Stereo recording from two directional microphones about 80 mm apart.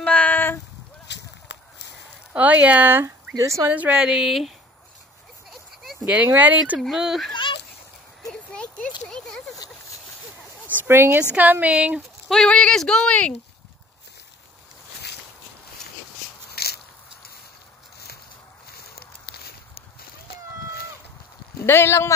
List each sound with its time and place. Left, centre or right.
0.0 s a sound: centre
2.3 s speech: right
3.3 s speech: right
3.6 s speech: centre
3.9 s speech: centre
5.5 s a sound: centre
6.0 s speech: centre
6.8 s speech: centre
7.3 s a sound: left
8.3 s a sound: centre
10.9 s speech: right
11.6 s speech: centre
12.3 s speech: centre
21.6 s speech: left